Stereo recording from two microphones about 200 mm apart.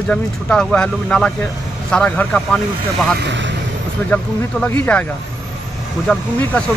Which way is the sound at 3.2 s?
65° right (ahead or behind).